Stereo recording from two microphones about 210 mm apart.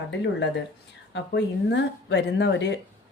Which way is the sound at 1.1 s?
55° left (ahead or behind).